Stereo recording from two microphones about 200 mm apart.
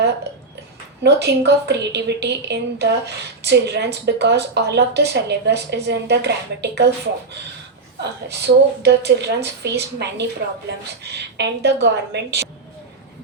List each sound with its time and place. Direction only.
1.0 s speech: 55° right (ahead or behind)
8.3 s speech: 55° right (ahead or behind)